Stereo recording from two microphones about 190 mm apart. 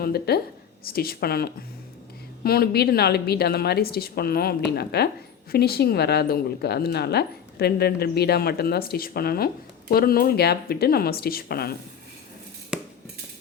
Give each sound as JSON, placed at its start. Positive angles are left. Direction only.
{"t": 0.0, "sound": "a woman's voice", "side_deg": 55}